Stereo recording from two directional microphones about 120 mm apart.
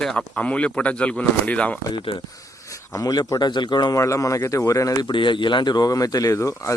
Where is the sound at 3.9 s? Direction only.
25° left (ahead or behind).